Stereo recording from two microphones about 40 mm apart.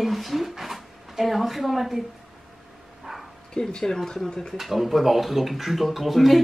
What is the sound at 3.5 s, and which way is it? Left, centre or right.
Speech, centre.